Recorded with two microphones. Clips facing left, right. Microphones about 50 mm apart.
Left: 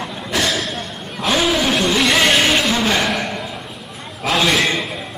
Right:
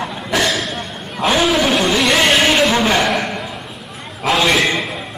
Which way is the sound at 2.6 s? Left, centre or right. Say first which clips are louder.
Right 3 dB; right.